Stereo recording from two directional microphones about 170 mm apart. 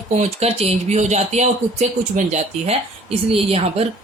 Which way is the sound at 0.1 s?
40° right (ahead or behind).